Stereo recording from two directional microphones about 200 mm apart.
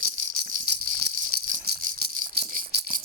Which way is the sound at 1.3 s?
50° right (ahead or behind).